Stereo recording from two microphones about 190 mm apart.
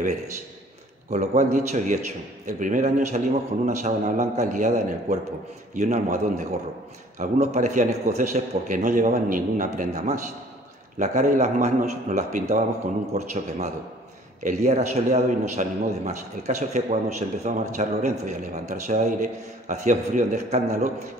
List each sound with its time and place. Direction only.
1.1 s a man's voice: 40° right (ahead or behind)